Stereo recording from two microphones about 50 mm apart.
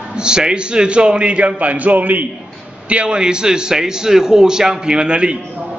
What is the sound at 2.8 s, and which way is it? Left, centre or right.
A man's voice, right.